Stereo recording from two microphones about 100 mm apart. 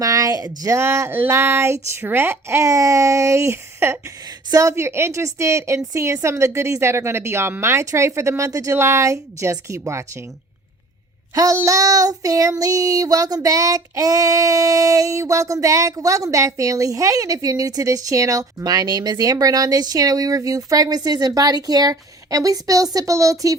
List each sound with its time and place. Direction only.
0.0 s a sound: 35° right (ahead or behind)
0.6 s a woman's voice: 30° right (ahead or behind)
11.5 s child singing: 30° right (ahead or behind)